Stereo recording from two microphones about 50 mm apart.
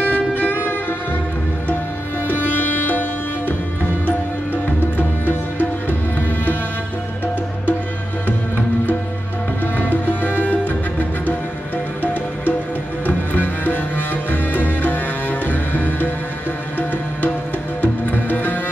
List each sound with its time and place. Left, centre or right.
0.1 s music: left
2.2 s music: left
4.9 s music: left
10.0 s music: left
12.0 s music: left
18.1 s music: left